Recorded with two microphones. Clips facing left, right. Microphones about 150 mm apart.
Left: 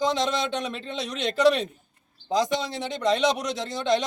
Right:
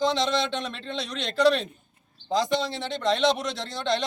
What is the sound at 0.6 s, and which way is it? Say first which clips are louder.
Speech: left 2 dB; 10° left (ahead or behind).